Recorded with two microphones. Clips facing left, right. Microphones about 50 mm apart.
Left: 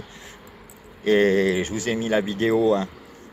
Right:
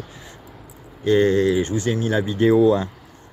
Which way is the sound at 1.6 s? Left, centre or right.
Centre.